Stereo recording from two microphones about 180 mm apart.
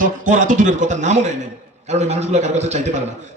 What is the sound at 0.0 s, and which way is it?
A man's voice, 45° right (ahead or behind).